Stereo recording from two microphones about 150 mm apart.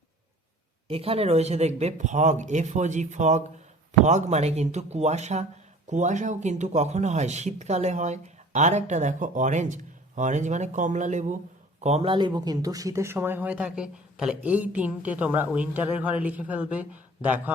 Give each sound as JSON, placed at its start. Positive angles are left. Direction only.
{"t": 0.9, "sound": "speech", "side_deg": -40}